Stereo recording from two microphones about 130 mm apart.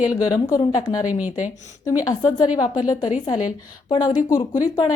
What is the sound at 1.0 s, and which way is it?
Speech, 10° right (ahead or behind).